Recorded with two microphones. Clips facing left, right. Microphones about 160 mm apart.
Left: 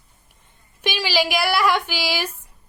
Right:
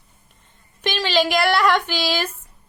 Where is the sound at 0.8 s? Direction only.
10° left (ahead or behind).